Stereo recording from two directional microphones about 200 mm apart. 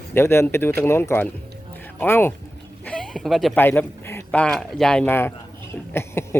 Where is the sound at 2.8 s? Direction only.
5° left (ahead or behind).